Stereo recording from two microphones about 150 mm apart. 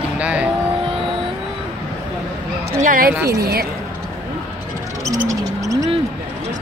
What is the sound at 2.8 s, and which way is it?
Speech, 65° right (ahead or behind).